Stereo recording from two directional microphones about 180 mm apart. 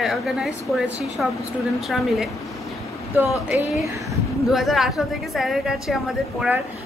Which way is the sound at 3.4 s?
15° right (ahead or behind).